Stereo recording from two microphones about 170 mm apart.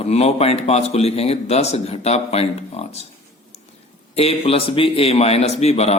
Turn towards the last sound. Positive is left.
turn(degrees=40)  # may be behind; listen again after turning